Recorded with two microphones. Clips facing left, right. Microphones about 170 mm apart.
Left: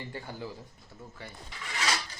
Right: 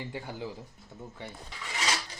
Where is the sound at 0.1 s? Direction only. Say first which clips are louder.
Right 2 dB; 15° right (ahead or behind).